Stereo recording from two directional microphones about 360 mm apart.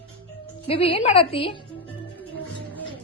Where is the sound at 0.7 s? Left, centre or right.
Centre.